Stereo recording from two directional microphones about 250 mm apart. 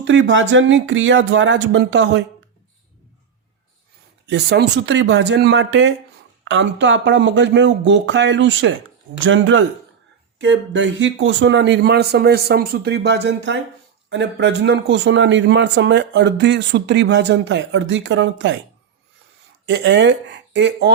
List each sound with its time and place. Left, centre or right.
0.0 s a man's voice: right
4.3 s a man's voice: right
19.6 s a man's voice: right